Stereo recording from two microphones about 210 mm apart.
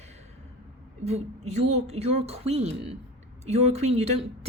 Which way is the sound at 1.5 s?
30° right (ahead or behind).